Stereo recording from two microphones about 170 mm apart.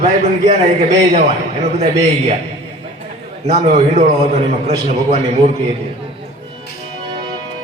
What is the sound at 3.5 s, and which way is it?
Speech, 40° right (ahead or behind).